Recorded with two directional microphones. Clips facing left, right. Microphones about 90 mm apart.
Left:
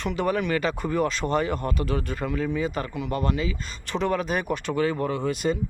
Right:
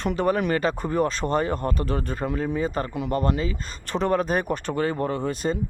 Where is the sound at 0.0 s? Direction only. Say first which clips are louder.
Right 2 dB; 35° right (ahead or behind).